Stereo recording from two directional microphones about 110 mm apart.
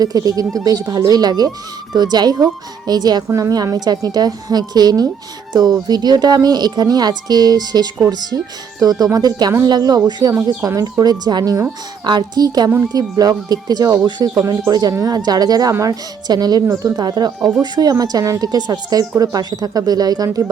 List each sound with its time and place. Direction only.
0.0 s a woman's voice: 35° right (ahead or behind)
3.2 s speech: 25° right (ahead or behind)
3.5 s a woman's voice: 35° right (ahead or behind)
10.7 s speech: 25° right (ahead or behind)
11.0 s a woman's voice: 35° right (ahead or behind)